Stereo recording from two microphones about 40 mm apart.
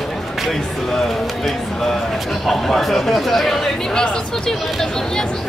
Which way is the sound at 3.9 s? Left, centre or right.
Centre.